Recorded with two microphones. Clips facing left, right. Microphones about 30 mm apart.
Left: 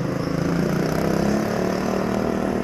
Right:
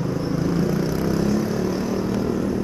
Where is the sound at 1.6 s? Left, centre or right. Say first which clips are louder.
Left 1 dB; left.